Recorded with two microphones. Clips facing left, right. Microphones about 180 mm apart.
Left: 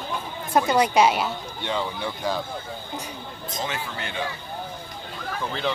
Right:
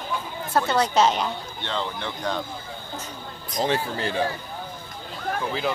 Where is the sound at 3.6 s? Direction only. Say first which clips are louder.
Right 7 dB; 35° right (ahead or behind).